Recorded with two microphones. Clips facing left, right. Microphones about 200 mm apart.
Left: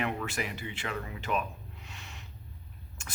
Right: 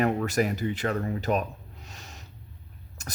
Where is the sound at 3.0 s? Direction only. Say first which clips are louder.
Right 7 dB; 40° right (ahead or behind).